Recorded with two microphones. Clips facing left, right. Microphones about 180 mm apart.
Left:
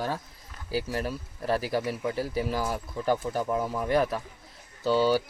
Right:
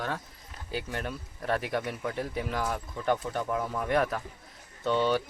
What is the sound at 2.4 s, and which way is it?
Speech, 5° left (ahead or behind).